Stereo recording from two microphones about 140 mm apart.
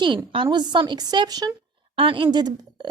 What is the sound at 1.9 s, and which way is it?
Speech, 40° right (ahead or behind).